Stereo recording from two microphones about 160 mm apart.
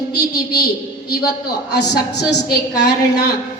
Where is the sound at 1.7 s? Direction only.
90° left.